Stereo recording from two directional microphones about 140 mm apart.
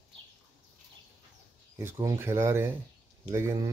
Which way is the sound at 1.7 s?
20° right (ahead or behind).